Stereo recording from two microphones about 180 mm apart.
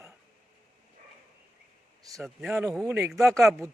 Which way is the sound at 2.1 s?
Centre (ahead or behind).